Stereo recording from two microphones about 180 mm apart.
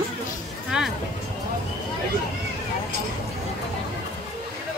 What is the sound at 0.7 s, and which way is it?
Speech, 5° right (ahead or behind).